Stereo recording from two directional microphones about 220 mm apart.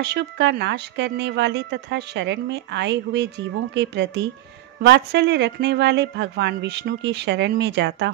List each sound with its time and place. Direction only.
0.0 s speech: 50° right (ahead or behind)